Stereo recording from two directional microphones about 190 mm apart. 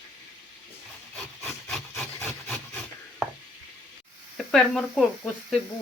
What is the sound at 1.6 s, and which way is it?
Wood, centre (ahead or behind).